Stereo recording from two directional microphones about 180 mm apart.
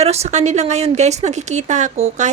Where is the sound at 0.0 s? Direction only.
35° right (ahead or behind).